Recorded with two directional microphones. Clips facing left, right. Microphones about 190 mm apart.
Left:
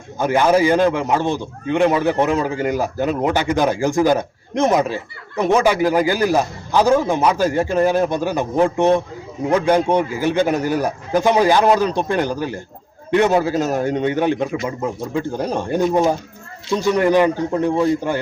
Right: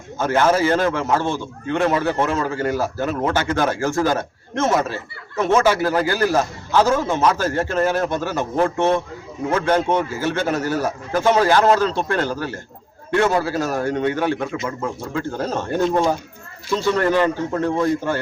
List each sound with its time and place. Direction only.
0.2 s a man's voice: 15° left (ahead or behind)